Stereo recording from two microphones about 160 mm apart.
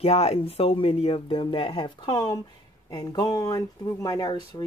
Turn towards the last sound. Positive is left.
turn(degrees=25)  # may be behind; listen again after turning